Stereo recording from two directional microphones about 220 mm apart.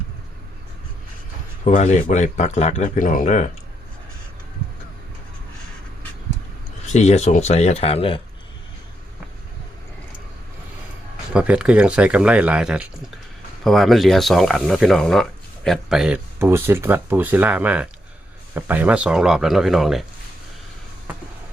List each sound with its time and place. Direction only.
1.6 s speech: 35° left (ahead or behind)
6.9 s speech: 30° left (ahead or behind)
11.3 s speech: 5° right (ahead or behind)